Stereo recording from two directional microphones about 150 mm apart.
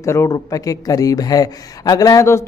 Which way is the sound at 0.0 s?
20° left (ahead or behind).